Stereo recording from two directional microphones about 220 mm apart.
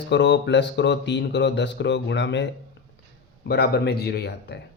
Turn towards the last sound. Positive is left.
turn(degrees=50)  # may be behind; listen again after turning